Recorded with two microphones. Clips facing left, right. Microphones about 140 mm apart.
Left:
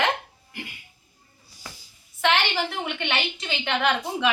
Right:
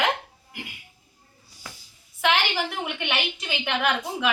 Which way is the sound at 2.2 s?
10° right (ahead or behind).